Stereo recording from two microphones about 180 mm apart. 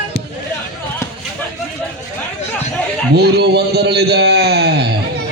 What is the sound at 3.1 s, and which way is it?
A man's voice, 65° right (ahead or behind).